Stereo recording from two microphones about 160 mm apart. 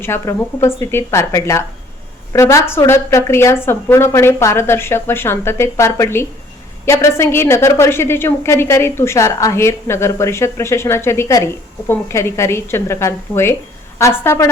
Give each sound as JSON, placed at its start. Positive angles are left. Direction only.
{"t": 0.0, "sound": "a woman's voice", "side_deg": 15}